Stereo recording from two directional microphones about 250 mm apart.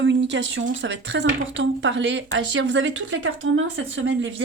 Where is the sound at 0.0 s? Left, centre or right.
Right.